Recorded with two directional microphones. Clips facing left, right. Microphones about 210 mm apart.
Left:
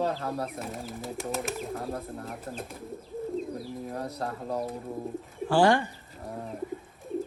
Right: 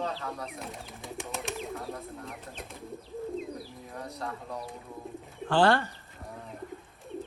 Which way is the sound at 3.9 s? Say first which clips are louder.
Left 5 dB; 40° left (ahead or behind).